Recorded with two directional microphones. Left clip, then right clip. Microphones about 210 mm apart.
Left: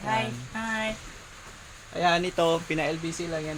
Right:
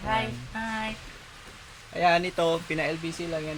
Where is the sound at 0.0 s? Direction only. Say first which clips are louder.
Even; centre (ahead or behind).